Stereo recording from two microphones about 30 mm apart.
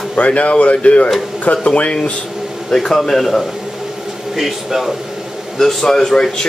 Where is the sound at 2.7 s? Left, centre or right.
Centre.